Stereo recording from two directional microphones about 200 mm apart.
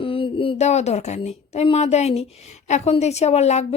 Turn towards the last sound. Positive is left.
turn(degrees=35)  # may be behind; listen again after turning